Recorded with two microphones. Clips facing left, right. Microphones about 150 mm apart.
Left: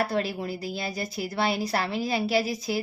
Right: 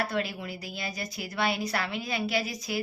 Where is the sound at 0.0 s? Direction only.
30° left (ahead or behind).